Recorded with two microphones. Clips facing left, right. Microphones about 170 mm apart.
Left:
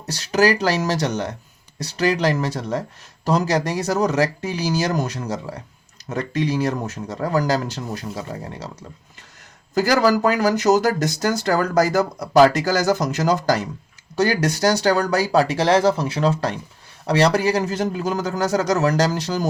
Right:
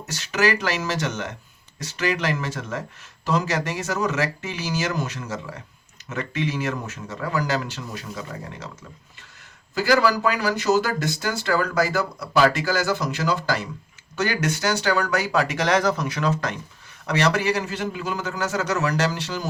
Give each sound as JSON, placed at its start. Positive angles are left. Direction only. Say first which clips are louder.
{"t": 0.1, "sound": "speech", "louder": "left 5 dB", "side_deg": 35}